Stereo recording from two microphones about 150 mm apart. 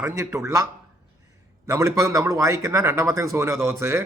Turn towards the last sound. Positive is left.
turn(degrees=-15)  # may be behind; listen again after turning